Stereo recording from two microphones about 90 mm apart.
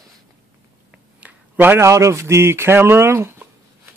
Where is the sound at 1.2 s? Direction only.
20° right (ahead or behind).